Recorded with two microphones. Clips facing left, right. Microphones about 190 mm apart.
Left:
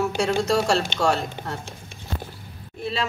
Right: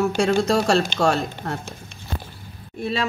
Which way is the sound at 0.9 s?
55° right (ahead or behind).